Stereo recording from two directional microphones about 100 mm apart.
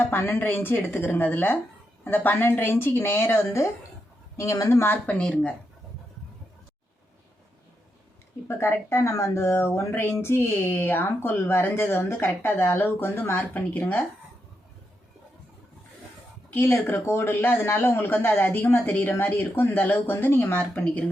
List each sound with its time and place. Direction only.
0.0 s speech: 25° left (ahead or behind)
4.8 s speech: 20° left (ahead or behind)
5.1 s speech: 10° left (ahead or behind)
8.4 s speech: 25° left (ahead or behind)
16.6 s speech: 20° left (ahead or behind)